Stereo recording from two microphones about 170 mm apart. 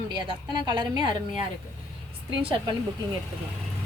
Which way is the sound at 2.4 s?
30° right (ahead or behind).